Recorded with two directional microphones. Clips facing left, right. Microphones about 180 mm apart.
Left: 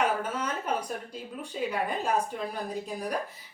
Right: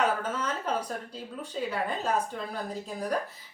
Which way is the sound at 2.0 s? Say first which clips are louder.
Left 1 dB; 10° left (ahead or behind).